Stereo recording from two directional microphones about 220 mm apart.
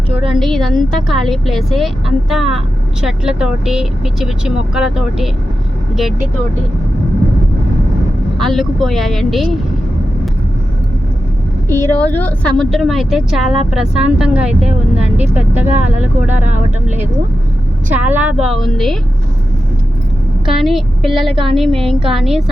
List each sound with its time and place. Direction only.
0.2 s a woman's voice: centre (ahead or behind)
8.4 s a woman's voice: centre (ahead or behind)
11.7 s a woman's voice: 10° left (ahead or behind)
20.4 s a woman's voice: centre (ahead or behind)
21.2 s a woman's voice: 25° right (ahead or behind)
21.5 s a woman's voice: centre (ahead or behind)